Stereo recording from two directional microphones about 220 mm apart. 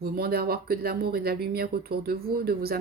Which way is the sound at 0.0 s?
45° right (ahead or behind).